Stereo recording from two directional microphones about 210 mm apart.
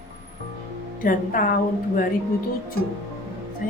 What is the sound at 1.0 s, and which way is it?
Speech, 40° left (ahead or behind).